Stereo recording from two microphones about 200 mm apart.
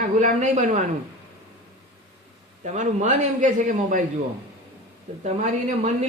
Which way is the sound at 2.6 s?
35° right (ahead or behind).